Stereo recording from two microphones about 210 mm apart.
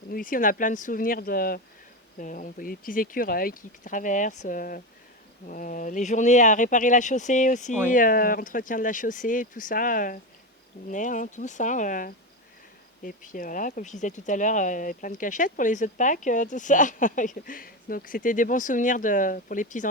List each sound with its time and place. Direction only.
0.1 s speech: 40° left (ahead or behind)